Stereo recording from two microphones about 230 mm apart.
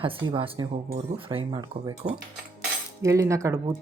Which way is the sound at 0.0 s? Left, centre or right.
Right.